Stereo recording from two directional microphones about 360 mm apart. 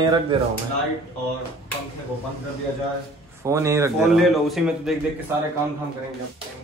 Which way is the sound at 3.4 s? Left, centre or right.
Centre.